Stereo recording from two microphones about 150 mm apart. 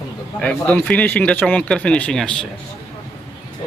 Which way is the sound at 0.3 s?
10° left (ahead or behind).